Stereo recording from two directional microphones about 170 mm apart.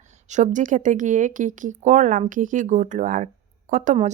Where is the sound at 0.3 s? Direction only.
45° right (ahead or behind).